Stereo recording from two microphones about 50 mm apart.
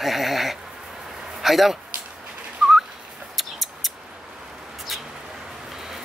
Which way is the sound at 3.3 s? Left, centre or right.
Centre.